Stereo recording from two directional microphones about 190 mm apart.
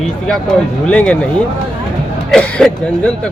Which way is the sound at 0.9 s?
5° left (ahead or behind).